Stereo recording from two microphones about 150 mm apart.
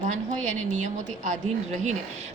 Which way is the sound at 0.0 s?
55° right (ahead or behind).